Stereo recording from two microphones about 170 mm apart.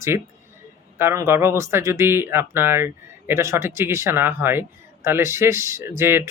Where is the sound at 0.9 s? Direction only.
15° right (ahead or behind).